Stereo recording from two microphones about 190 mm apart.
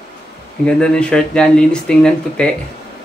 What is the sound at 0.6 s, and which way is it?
Speech, 5° left (ahead or behind).